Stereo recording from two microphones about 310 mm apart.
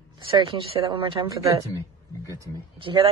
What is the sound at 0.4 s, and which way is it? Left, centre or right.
Speech, centre.